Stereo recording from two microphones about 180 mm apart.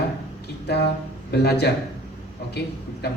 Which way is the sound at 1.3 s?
65° left (ahead or behind).